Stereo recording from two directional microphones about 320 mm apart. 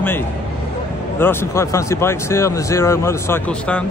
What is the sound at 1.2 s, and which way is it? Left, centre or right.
Speech, centre.